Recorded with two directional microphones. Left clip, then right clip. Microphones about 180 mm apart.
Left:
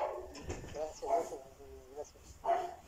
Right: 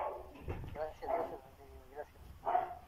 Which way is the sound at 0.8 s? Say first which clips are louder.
Even; 5° right (ahead or behind).